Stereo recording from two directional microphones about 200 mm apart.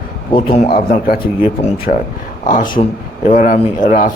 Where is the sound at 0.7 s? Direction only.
50° left (ahead or behind).